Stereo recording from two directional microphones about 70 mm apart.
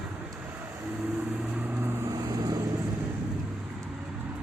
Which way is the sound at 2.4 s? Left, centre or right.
Right.